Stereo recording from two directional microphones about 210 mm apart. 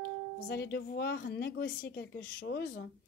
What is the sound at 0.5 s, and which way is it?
Speech, 50° left (ahead or behind).